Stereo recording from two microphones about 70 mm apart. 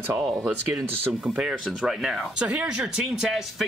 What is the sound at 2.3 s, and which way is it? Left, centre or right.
Speech, centre.